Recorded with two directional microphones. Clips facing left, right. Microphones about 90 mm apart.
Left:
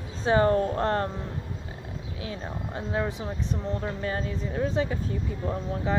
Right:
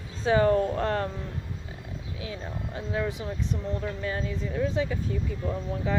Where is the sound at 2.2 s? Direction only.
35° left (ahead or behind).